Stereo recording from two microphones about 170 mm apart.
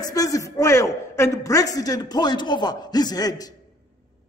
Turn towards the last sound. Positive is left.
turn(degrees=20)  # may be behind; listen again after turning